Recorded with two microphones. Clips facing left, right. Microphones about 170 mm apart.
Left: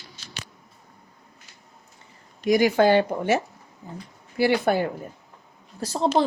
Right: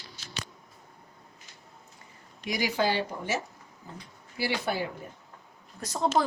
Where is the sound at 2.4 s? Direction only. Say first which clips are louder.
Left 10 dB; 50° left (ahead or behind).